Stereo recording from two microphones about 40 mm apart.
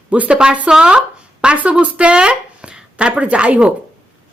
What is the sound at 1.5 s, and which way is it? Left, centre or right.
Speech, right.